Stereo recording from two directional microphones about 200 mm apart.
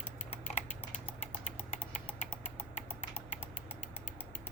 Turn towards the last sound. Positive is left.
turn(degrees=35)  # may be behind; listen again after turning